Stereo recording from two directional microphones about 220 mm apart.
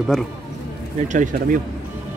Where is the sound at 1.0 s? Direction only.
35° right (ahead or behind).